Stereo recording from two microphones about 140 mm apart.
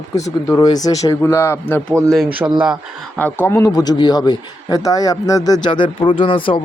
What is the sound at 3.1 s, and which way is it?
A man's voice, 15° left (ahead or behind).